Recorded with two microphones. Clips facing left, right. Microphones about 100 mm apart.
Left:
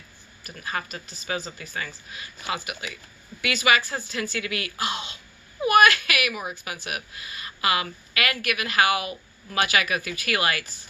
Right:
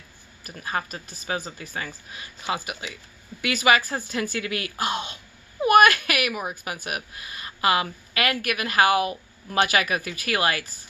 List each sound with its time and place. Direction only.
0.5 s a woman's voice: 30° right (ahead or behind)
2.5 s a woman's voice: 30° right (ahead or behind)